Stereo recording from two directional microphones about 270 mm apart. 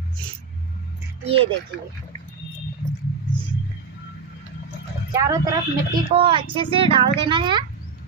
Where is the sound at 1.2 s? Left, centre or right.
Right.